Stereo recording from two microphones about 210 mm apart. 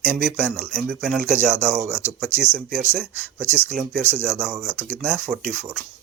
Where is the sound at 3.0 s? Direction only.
5° left (ahead or behind).